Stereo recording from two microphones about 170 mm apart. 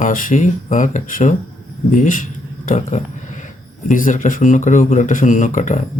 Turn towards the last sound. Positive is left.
turn(degrees=45)  # may be behind; listen again after turning